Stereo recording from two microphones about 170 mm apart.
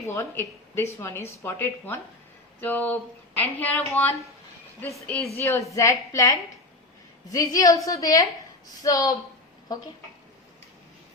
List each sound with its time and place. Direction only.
0.1 s a woman's voice: 15° left (ahead or behind)